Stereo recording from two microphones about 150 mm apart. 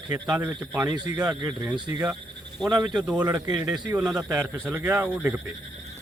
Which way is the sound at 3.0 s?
10° right (ahead or behind).